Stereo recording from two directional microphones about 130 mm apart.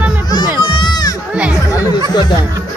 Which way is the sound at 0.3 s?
35° left (ahead or behind).